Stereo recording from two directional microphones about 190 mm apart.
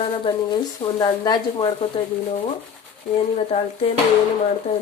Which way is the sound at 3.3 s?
35° left (ahead or behind).